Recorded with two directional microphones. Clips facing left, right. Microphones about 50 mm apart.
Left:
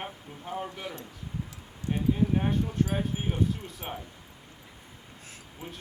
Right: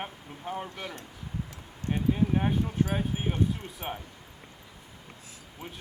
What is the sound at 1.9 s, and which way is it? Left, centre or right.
Speech, centre.